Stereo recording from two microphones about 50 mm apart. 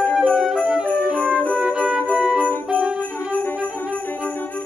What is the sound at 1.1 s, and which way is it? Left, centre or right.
Music, right.